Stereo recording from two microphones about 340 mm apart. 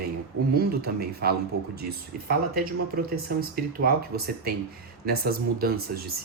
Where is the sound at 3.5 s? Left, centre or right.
Right.